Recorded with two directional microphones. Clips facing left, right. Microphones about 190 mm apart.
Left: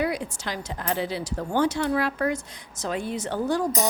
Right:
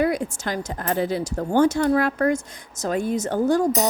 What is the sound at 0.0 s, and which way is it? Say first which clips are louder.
Speech: right 5 dB; 50° right (ahead or behind).